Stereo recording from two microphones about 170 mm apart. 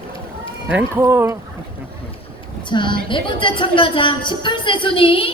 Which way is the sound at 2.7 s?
30° left (ahead or behind).